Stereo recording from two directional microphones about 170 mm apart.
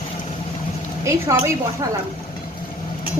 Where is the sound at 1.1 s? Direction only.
15° right (ahead or behind).